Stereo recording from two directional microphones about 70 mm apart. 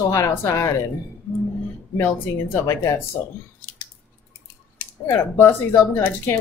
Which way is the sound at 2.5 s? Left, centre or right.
Left.